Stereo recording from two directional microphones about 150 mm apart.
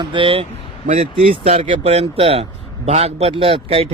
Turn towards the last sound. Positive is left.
turn(degrees=-40)  # may be behind; listen again after turning